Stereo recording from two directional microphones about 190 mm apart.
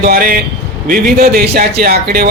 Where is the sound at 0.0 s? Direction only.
50° right (ahead or behind).